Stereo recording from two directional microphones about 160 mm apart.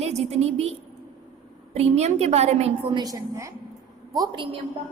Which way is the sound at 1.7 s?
45° right (ahead or behind).